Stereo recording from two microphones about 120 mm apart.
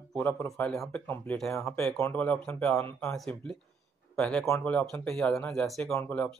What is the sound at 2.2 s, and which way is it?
Speech, 5° left (ahead or behind).